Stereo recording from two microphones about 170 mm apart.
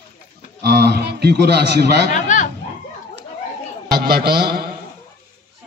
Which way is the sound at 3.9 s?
65° right (ahead or behind).